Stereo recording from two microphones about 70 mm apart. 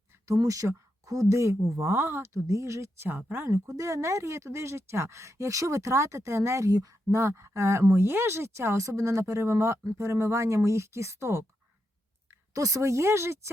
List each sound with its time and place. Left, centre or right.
0.3 s speech: right